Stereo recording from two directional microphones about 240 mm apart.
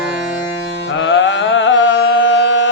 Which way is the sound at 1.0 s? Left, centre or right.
Left.